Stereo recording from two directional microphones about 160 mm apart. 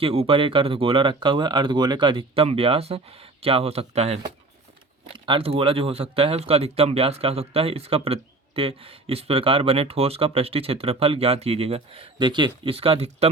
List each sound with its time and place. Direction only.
0.0 s speech: 35° right (ahead or behind)